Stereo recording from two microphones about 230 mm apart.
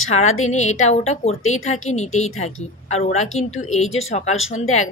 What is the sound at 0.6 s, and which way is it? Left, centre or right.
Speech, left.